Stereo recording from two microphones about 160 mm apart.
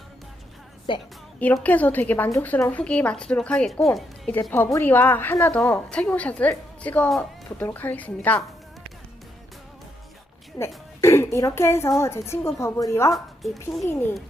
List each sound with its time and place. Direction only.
0.9 s a woman's voice: 30° left (ahead or behind)
1.4 s a woman's voice: 10° left (ahead or behind)
4.5 s a woman's voice: 15° left (ahead or behind)
10.6 s a woman's voice: 20° left (ahead or behind)
13.1 s a woman's voice: centre (ahead or behind)
13.8 s a woman's voice: 15° left (ahead or behind)